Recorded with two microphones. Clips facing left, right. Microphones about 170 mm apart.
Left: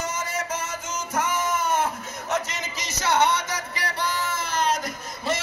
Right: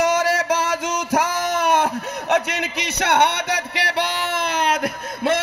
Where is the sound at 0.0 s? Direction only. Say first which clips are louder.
Right 11 dB; 75° right (ahead or behind).